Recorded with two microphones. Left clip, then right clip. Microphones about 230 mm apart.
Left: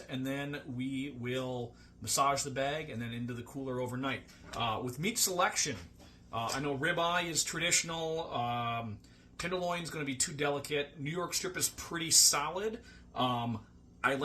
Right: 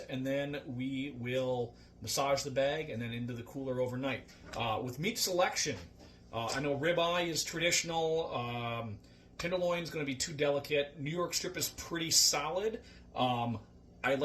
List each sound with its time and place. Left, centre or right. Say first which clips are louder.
0.1 s speech: right 2 dB; left